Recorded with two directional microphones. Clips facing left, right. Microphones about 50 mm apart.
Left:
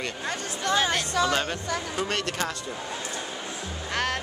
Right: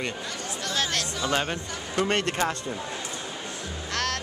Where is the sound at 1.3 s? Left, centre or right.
Centre.